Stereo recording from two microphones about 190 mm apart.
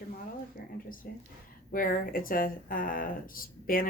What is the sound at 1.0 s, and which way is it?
Speech, 50° left (ahead or behind).